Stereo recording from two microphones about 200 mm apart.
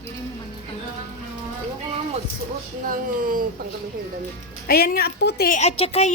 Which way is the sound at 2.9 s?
45° right (ahead or behind).